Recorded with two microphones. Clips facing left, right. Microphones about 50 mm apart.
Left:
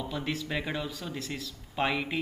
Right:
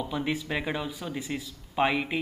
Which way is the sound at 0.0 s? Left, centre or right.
Centre.